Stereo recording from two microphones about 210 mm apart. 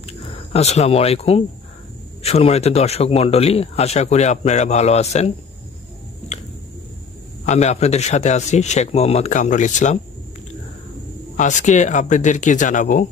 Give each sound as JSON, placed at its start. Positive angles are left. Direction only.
{"t": 0.0, "sound": "a sound", "side_deg": 30}
{"t": 2.2, "sound": "speech", "side_deg": 30}
{"t": 7.4, "sound": "speech", "side_deg": 30}
{"t": 11.3, "sound": "speech", "side_deg": 35}